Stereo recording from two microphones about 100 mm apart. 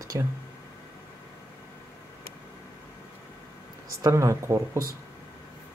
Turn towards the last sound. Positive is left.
turn(degrees=-30)  # may be behind; listen again after turning